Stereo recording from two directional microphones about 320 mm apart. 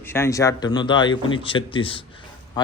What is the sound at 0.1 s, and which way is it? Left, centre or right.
A man's voice, centre.